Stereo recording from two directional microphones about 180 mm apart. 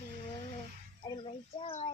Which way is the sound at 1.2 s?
30° left (ahead or behind).